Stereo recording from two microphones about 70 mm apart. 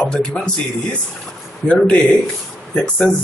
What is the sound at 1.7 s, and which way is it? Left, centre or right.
Speech, centre.